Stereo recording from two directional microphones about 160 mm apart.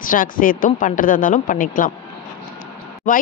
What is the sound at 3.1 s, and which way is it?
Speech, 55° left (ahead or behind).